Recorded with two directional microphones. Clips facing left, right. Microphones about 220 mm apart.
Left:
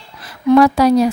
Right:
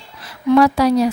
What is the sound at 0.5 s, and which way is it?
Speech, 45° left (ahead or behind).